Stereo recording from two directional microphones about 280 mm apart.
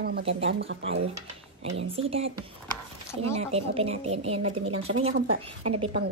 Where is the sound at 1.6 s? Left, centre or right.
Right.